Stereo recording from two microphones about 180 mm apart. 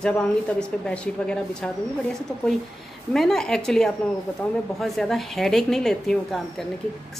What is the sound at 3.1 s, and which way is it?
A woman's voice, centre (ahead or behind).